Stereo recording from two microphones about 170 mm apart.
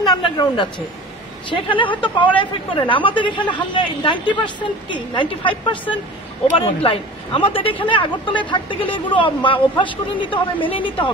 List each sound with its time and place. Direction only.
0.0 s speech: 25° left (ahead or behind)